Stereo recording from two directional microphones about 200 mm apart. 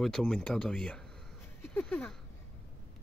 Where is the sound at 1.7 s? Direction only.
10° left (ahead or behind).